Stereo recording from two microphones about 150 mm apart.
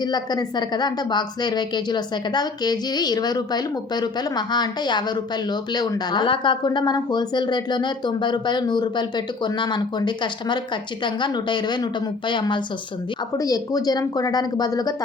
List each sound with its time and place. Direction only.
0.0 s a woman's voice: 25° left (ahead or behind)